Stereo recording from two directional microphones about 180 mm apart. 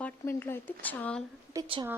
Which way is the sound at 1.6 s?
30° right (ahead or behind).